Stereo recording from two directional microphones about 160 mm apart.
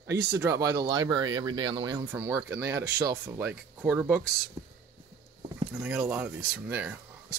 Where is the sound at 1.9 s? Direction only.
15° right (ahead or behind).